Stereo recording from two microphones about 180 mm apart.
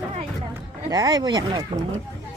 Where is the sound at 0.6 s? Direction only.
20° right (ahead or behind).